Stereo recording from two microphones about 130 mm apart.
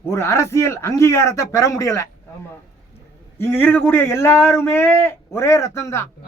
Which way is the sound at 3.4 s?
15° left (ahead or behind).